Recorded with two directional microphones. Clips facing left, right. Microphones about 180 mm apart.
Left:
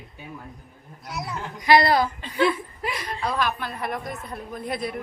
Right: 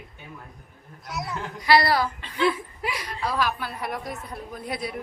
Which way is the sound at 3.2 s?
5° right (ahead or behind).